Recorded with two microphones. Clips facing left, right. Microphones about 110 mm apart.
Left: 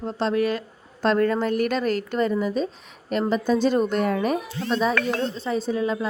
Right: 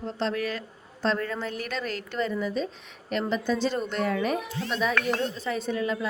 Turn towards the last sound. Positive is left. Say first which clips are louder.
# left 4 dB
turn(degrees=35)  # may be behind; listen again after turning